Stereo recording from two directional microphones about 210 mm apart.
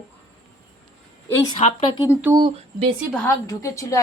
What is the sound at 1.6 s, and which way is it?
Speech, 20° left (ahead or behind).